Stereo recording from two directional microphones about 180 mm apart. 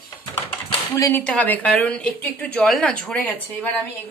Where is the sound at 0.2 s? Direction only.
20° left (ahead or behind).